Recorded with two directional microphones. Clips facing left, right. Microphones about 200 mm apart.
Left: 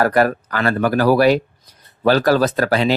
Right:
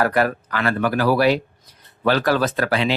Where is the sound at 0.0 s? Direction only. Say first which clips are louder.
Left 3 dB; 40° left (ahead or behind).